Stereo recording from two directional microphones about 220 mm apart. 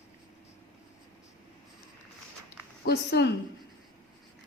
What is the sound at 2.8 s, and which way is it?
Speech, 50° left (ahead or behind).